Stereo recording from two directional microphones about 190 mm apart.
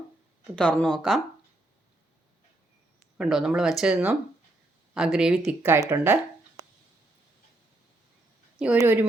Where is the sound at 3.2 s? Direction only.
Centre (ahead or behind).